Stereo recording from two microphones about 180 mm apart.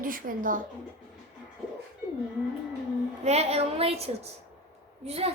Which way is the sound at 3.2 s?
35° right (ahead or behind).